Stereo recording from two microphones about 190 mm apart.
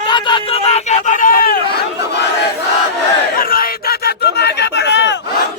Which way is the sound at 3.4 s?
50° left (ahead or behind).